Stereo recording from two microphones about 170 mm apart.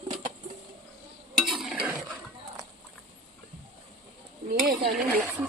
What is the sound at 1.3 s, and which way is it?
Stir, centre (ahead or behind).